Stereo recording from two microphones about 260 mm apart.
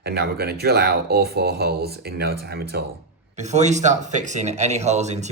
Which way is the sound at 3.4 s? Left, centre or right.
Right.